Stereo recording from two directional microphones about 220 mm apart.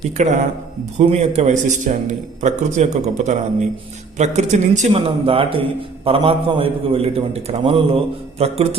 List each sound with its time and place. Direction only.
0.2 s a man's voice: 35° right (ahead or behind)